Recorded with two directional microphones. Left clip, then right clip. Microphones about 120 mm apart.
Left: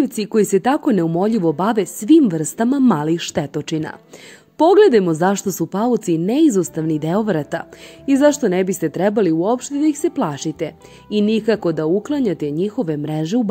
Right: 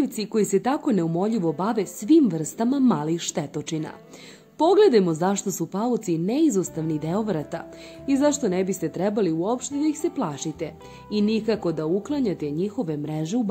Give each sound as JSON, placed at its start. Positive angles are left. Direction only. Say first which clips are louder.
{"t": 0.0, "sound": "a woman's voice", "louder": "left 7 dB", "side_deg": 45}